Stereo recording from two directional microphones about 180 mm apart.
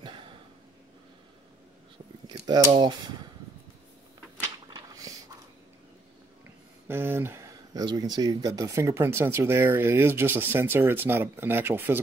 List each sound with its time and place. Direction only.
2.2 s mechanisms: 20° right (ahead or behind)
4.4 s a sound: 20° right (ahead or behind)
6.9 s speech: 10° right (ahead or behind)